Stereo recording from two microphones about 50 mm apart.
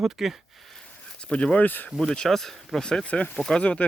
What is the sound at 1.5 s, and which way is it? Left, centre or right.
Speech, left.